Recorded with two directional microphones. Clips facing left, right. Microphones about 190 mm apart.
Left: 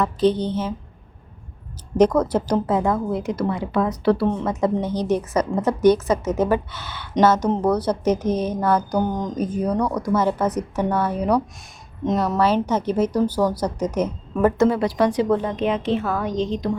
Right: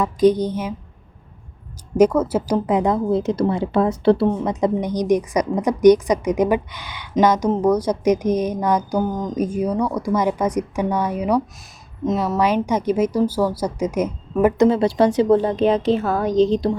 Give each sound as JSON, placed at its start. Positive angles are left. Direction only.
{"t": 0.0, "sound": "speech", "side_deg": -10}
{"t": 2.0, "sound": "a woman's voice", "side_deg": -10}
{"t": 4.3, "sound": "speech", "side_deg": -15}